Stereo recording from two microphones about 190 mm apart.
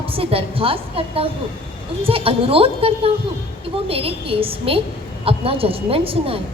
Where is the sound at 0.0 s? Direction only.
30° right (ahead or behind).